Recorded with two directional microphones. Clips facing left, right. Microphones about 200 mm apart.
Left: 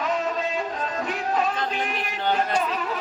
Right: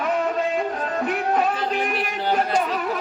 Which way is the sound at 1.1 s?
60° right (ahead or behind).